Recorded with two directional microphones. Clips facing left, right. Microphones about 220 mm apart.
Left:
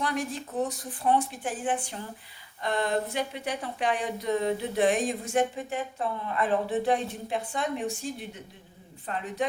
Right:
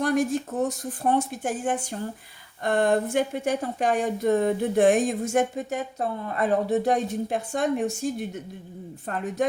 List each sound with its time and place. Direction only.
0.0 s speech: 45° right (ahead or behind)